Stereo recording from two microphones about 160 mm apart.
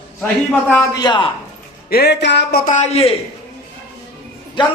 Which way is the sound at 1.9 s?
85° left.